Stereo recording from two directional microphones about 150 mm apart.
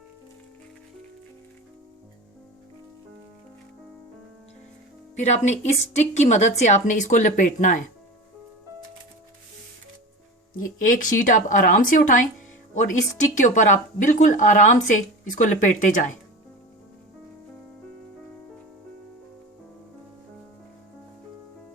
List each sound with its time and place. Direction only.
5.1 s a woman's voice: 50° left (ahead or behind)
10.6 s a woman's voice: 60° left (ahead or behind)